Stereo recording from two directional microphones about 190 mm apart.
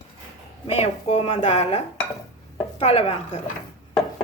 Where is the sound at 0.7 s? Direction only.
35° left (ahead or behind).